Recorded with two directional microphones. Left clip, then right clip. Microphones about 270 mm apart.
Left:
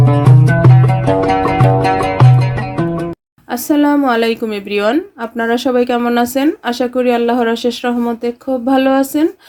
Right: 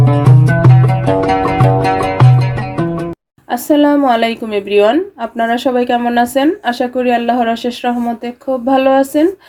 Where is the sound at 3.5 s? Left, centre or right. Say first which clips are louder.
Right 2 dB; left.